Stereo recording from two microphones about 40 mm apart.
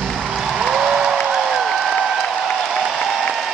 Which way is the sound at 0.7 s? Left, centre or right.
Centre.